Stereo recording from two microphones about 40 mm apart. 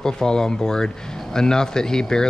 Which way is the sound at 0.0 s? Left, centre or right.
Centre.